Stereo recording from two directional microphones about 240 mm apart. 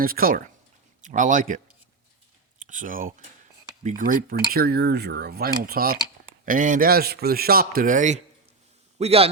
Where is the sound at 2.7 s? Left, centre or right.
Right.